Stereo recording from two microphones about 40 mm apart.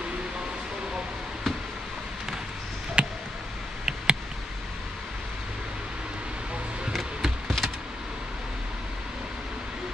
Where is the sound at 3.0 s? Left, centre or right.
Right.